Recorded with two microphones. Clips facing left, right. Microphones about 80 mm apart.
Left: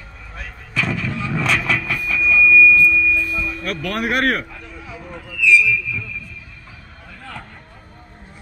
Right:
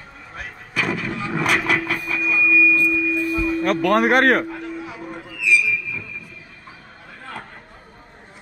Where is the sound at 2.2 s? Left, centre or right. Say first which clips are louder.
Left 5 dB; right.